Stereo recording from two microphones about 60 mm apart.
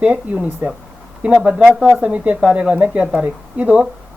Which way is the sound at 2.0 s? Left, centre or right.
Right.